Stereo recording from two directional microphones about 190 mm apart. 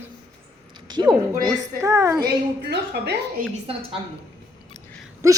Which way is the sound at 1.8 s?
15° right (ahead or behind).